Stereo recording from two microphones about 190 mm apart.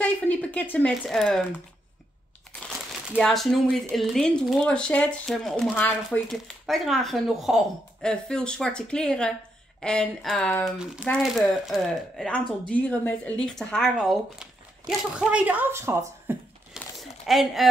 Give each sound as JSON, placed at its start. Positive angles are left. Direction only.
{"t": 0.0, "sound": "a woman's voice", "side_deg": 10}
{"t": 3.1, "sound": "a woman's voice", "side_deg": 0}
{"t": 16.3, "sound": "a sound", "side_deg": 0}